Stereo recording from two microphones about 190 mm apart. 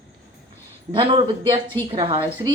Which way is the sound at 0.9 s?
30° right (ahead or behind).